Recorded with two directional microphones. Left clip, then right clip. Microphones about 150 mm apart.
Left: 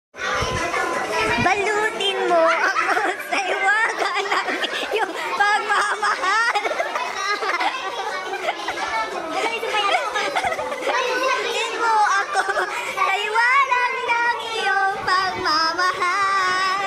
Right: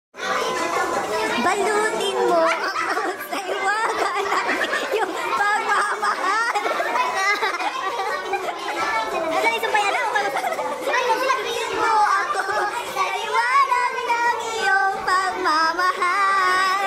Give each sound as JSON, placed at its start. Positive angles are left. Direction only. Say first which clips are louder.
{"t": 1.4, "sound": "music", "louder": "left 1 dB", "side_deg": 0}
{"t": 3.6, "sound": "a sound", "louder": "left 2 dB", "side_deg": -10}
{"t": 4.9, "sound": "chatter", "louder": "even", "side_deg": 15}
{"t": 12.0, "sound": "chatter", "louder": "even", "side_deg": 15}
{"t": 13.4, "sound": "child singing", "louder": "even", "side_deg": 25}
{"t": 15.0, "sound": "music", "louder": "even", "side_deg": -10}
{"t": 15.8, "sound": "music", "louder": "even", "side_deg": 0}